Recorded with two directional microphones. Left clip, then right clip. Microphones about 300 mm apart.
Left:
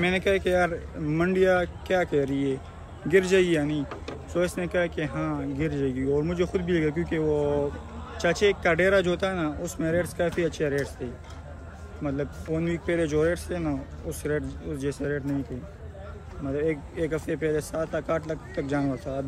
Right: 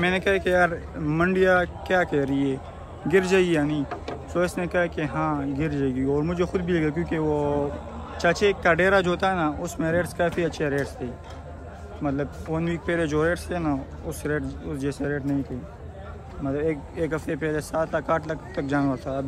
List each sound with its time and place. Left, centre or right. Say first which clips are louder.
0.0 s speech: right 2 dB; centre
5.9 s a man's voice: right 2 dB; centre
6.1 s speech: right 1 dB; centre
16.9 s speech: right 1 dB; centre